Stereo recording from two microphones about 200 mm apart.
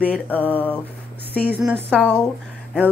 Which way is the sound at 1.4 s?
10° right (ahead or behind).